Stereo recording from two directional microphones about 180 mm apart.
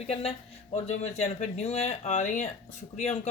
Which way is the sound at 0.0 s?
35° left (ahead or behind).